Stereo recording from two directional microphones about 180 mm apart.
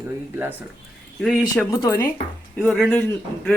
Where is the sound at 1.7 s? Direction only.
20° left (ahead or behind).